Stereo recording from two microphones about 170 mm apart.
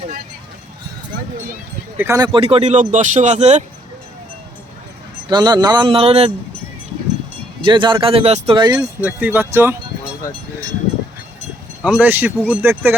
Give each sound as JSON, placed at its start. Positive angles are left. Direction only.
{"t": 2.0, "sound": "speech", "side_deg": -20}
{"t": 5.3, "sound": "speech", "side_deg": -25}
{"t": 7.6, "sound": "speech", "side_deg": -30}
{"t": 9.0, "sound": "speech", "side_deg": -10}
{"t": 11.8, "sound": "speech", "side_deg": -5}